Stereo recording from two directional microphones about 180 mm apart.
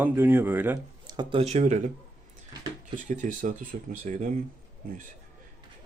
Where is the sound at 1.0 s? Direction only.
25° right (ahead or behind).